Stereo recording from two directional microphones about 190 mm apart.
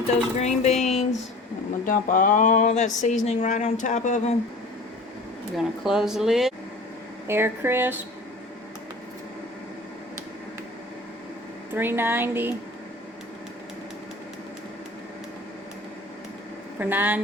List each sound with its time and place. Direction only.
0.3 s speech: 35° left (ahead or behind)
5.5 s speech: centre (ahead or behind)
7.3 s speech: 10° right (ahead or behind)
11.7 s speech: 10° right (ahead or behind)
16.7 s speech: 10° right (ahead or behind)